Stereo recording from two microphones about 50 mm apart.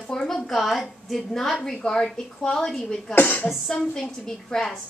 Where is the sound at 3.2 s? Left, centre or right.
Left.